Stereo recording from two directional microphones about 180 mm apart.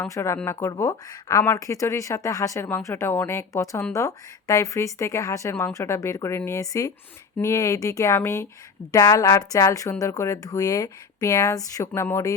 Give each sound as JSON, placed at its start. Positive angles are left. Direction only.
{"t": 0.0, "sound": "speech", "side_deg": 15}